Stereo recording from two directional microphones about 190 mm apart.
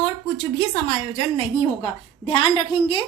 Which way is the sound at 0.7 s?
35° left (ahead or behind).